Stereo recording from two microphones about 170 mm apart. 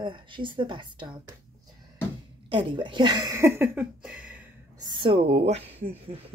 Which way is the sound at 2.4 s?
30° right (ahead or behind).